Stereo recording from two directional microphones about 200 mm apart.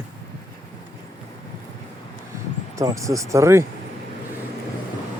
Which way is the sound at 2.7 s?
15° right (ahead or behind).